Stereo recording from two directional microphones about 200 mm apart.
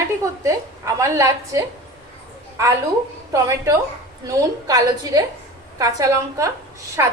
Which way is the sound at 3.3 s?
15° right (ahead or behind).